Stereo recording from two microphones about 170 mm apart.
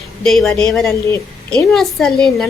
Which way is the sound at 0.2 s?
Centre (ahead or behind).